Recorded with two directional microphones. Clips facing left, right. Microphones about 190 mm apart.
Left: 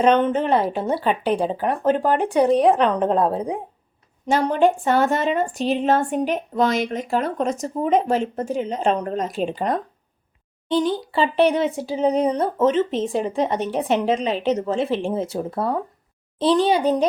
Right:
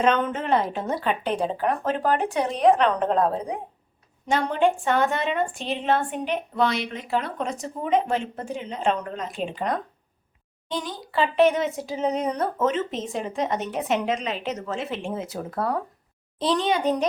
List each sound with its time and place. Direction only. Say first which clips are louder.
0.0 s a woman's voice: left 5 dB; 30° left (ahead or behind)
4.3 s a woman's voice: left 4 dB; 40° left (ahead or behind)
10.8 s a woman's voice: left 5 dB; 30° left (ahead or behind)